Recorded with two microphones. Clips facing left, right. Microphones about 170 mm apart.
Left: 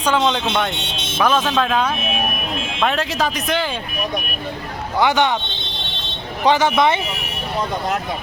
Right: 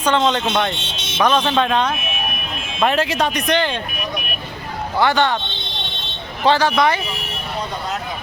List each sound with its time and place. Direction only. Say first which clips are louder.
0.0 s speech: right 1 dB; 5° left (ahead or behind)
4.9 s speech: even; 20° left (ahead or behind)
6.4 s speech: even; 20° left (ahead or behind)